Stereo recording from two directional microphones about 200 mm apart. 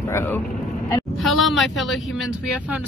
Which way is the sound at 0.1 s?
10° left (ahead or behind).